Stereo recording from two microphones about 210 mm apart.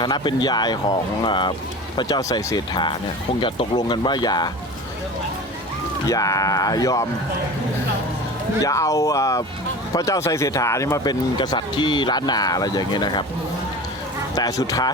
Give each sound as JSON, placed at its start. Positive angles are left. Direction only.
{"t": 0.0, "sound": "speech", "side_deg": 20}
{"t": 6.1, "sound": "speech", "side_deg": 15}
{"t": 8.6, "sound": "speech", "side_deg": 15}
{"t": 14.3, "sound": "speech", "side_deg": 15}